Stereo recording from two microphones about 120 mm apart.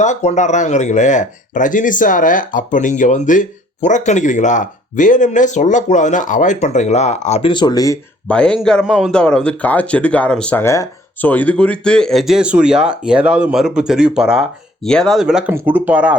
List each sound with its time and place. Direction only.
0.0 s speech: 75° left (ahead or behind)
7.4 s speech: 40° left (ahead or behind)
8.3 s speech: 10° left (ahead or behind)
10.6 s speech: 20° left (ahead or behind); by 14.4 s 5° right (ahead or behind)
14.8 s speech: 5° left (ahead or behind)
15.5 s speech: 15° right (ahead or behind)